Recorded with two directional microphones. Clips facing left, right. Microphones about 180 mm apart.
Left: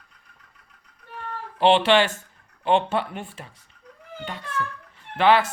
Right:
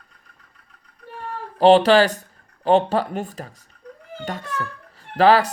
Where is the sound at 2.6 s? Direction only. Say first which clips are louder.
Right 4 dB; 40° right (ahead or behind).